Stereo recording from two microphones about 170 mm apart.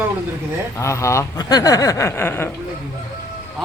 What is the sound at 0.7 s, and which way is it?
Speech, 15° left (ahead or behind).